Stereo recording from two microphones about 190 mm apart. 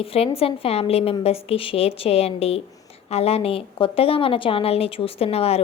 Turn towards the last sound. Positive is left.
turn(degrees=30)  # may be behind; listen again after turning